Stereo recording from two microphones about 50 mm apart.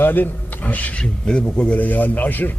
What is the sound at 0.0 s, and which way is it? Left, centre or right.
Speech, left.